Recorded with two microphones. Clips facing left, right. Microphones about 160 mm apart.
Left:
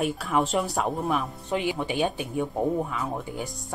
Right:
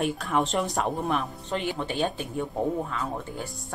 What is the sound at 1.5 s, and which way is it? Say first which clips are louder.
A woman's voice: left 3 dB; 15° left (ahead or behind).